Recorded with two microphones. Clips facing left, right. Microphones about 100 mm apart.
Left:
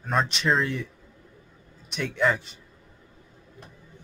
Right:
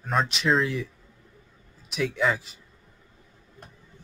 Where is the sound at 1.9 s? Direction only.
Centre (ahead or behind).